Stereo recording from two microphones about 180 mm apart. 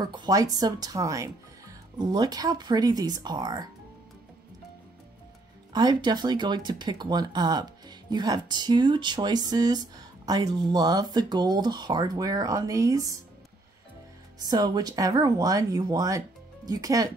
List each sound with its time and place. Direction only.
0.0 s speech: 25° right (ahead or behind)
5.7 s speech: 25° right (ahead or behind)
14.4 s speech: 25° right (ahead or behind)